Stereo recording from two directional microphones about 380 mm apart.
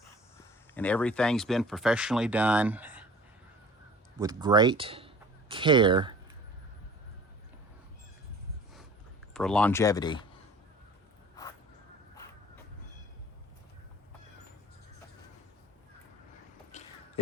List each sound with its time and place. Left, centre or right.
0.7 s speech: centre
4.2 s speech: centre
9.3 s speech: centre
16.7 s a sound: centre